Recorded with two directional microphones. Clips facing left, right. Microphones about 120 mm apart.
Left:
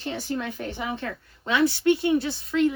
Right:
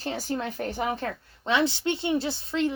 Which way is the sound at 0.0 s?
40° right (ahead or behind).